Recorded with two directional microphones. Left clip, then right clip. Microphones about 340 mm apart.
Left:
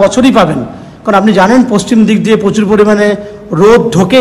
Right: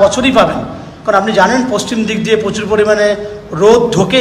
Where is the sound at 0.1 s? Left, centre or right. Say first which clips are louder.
Left 2 dB; centre.